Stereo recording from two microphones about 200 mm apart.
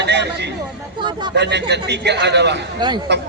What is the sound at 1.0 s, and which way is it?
Speech, 25° right (ahead or behind).